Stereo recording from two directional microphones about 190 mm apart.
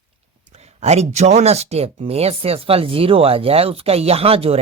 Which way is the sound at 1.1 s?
35° right (ahead or behind).